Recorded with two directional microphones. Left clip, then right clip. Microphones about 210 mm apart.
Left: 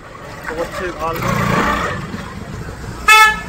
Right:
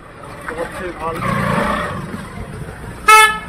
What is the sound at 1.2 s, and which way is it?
Roar, 35° left (ahead or behind).